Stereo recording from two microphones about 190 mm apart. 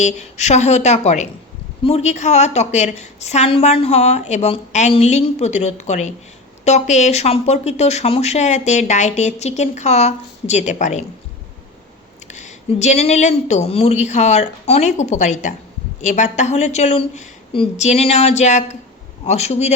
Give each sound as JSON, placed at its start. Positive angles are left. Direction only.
{"t": 0.0, "sound": "speech", "side_deg": 35}
{"t": 12.3, "sound": "speech", "side_deg": 40}